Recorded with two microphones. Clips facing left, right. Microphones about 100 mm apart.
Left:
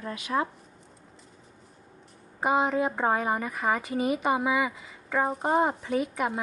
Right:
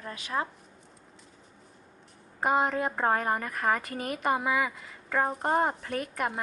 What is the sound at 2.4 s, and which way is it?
A woman's voice, 5° left (ahead or behind).